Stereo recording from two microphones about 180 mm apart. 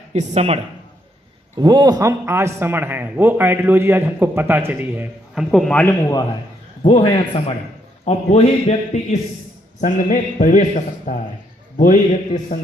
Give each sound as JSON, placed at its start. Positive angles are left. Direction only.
{"t": 0.1, "sound": "speech", "side_deg": -40}
{"t": 1.5, "sound": "a man's voice", "side_deg": -25}
{"t": 6.8, "sound": "a man's voice", "side_deg": 30}
{"t": 9.8, "sound": "a man's voice", "side_deg": 45}